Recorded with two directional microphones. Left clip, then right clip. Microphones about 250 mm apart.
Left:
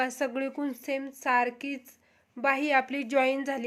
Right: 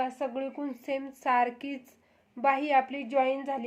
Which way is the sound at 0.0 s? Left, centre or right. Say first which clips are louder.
Left 2 dB; left.